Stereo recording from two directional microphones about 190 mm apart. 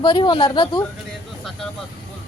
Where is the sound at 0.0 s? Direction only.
25° left (ahead or behind).